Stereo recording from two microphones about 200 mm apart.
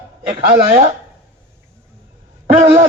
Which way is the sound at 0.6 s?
30° right (ahead or behind).